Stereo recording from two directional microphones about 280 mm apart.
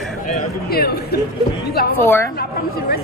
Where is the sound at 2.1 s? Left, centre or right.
Centre.